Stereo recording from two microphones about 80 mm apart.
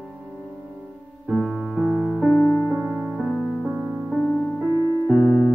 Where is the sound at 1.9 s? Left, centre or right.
Centre.